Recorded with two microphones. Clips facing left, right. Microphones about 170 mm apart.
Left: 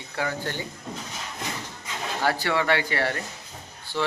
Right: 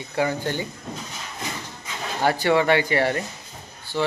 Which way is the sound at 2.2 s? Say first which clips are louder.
Right 5 dB; 20° right (ahead or behind).